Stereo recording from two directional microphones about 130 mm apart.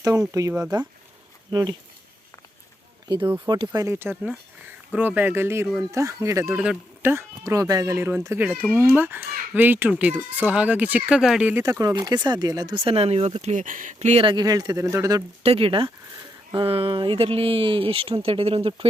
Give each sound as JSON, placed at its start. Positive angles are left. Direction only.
{"t": 0.0, "sound": "speech", "side_deg": -25}
{"t": 3.4, "sound": "speech", "side_deg": -35}
{"t": 3.9, "sound": "speech", "side_deg": -15}
{"t": 6.6, "sound": "speech", "side_deg": -10}
{"t": 7.1, "sound": "speech", "side_deg": -20}
{"t": 11.6, "sound": "speech", "side_deg": -25}
{"t": 14.3, "sound": "speech", "side_deg": -30}
{"t": 15.4, "sound": "speech", "side_deg": -45}